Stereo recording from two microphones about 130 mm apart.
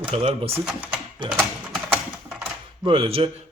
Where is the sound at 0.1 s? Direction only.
45° right (ahead or behind).